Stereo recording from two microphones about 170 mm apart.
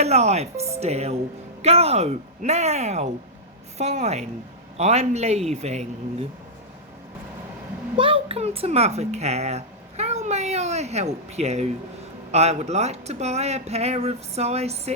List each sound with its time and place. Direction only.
0.0 s speech: 40° right (ahead or behind)
7.9 s speech: 30° right (ahead or behind)